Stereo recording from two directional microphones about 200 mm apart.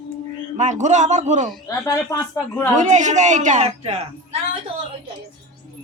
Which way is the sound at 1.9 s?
15° left (ahead or behind).